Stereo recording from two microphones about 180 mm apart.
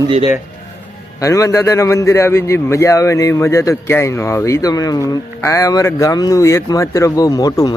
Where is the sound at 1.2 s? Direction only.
20° left (ahead or behind).